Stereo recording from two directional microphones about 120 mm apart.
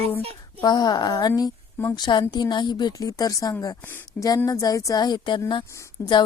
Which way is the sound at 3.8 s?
20° left (ahead or behind).